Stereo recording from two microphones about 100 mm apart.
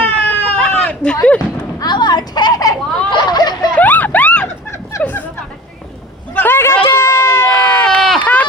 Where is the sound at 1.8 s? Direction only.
45° left (ahead or behind).